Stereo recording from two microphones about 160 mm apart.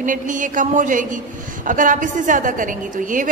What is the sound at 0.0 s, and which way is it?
A man's voice, 55° right (ahead or behind).